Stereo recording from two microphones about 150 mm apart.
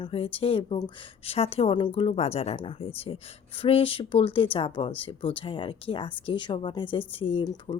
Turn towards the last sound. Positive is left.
turn(degrees=35)  # may be behind; listen again after turning